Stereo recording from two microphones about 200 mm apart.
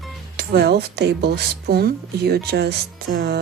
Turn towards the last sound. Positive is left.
turn(degrees=-50)  # may be behind; listen again after turning